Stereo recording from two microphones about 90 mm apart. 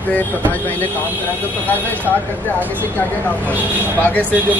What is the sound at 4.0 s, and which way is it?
Speech, 15° left (ahead or behind).